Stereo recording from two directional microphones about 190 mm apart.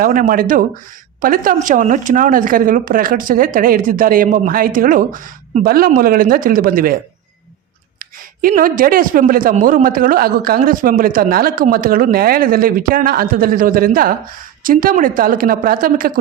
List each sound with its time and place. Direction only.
0.0 s a man's voice: 45° right (ahead or behind)
8.4 s a man's voice: 50° right (ahead or behind)